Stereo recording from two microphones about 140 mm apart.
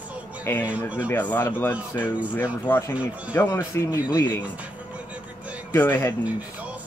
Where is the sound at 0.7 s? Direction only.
10° right (ahead or behind).